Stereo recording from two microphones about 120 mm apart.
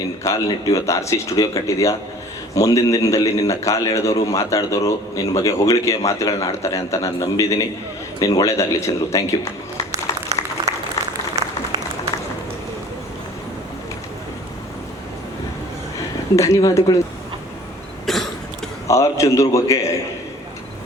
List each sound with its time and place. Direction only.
0.3 s a man's voice: 30° left (ahead or behind)
10.4 s applause: 35° left (ahead or behind)
16.3 s a man's voice: 25° left (ahead or behind)
18.0 s cough: 5° left (ahead or behind)
18.9 s a man's voice: 25° left (ahead or behind)